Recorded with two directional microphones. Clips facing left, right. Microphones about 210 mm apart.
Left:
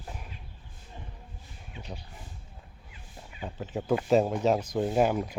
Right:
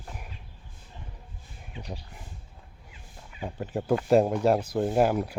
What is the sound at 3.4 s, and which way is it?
Speech, 10° right (ahead or behind).